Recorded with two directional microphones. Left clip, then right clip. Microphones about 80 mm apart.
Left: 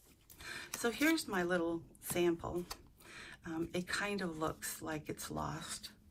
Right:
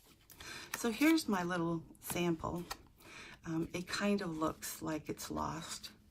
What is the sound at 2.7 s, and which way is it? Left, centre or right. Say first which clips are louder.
Speech: right 2 dB; right.